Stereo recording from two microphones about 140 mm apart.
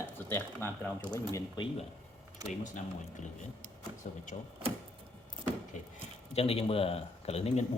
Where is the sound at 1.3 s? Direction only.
30° left (ahead or behind).